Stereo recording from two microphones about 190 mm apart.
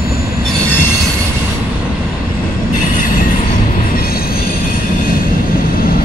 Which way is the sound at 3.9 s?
50° left (ahead or behind).